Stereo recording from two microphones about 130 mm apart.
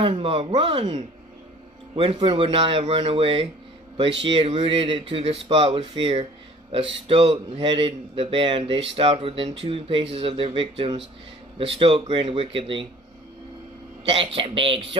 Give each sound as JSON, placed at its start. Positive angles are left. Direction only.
{"t": 0.0, "sound": "speech", "side_deg": -45}
{"t": 2.0, "sound": "speech", "side_deg": -40}
{"t": 14.1, "sound": "speech", "side_deg": -45}